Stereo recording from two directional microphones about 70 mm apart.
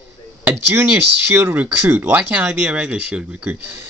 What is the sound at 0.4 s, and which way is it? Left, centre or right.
Speech, right.